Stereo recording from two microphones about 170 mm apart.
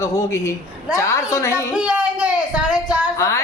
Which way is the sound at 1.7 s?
5° right (ahead or behind).